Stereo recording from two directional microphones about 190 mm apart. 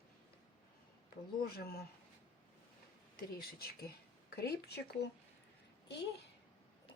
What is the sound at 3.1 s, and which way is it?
Speech, 55° left (ahead or behind).